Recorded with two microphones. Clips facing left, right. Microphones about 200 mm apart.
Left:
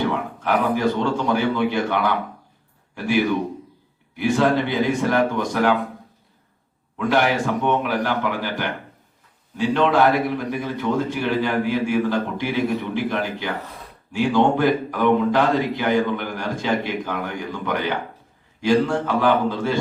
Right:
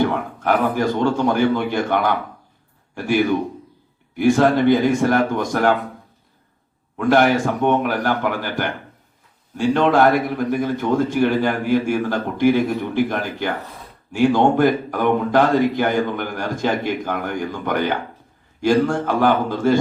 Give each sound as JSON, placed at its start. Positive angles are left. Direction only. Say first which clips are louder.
{"t": 0.1, "sound": "a man's voice", "louder": "right 2 dB", "side_deg": -50}
{"t": 4.2, "sound": "a man's voice", "louder": "right 4 dB", "side_deg": -45}
{"t": 6.9, "sound": "a man's voice", "louder": "right 4 dB", "side_deg": -50}